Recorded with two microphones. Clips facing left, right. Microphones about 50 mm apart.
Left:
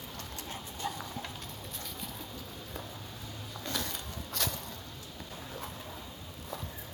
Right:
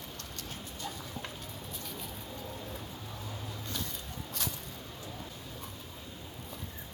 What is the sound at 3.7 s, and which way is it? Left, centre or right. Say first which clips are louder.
Music: left 6 dB; left.